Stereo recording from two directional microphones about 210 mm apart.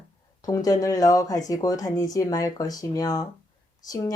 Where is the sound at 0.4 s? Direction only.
15° left (ahead or behind).